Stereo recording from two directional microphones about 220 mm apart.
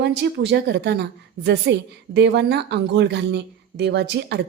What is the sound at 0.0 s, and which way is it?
Speech, 50° right (ahead or behind).